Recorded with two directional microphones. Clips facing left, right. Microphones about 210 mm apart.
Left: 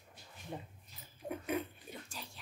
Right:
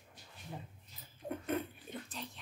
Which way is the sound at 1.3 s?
Centre (ahead or behind).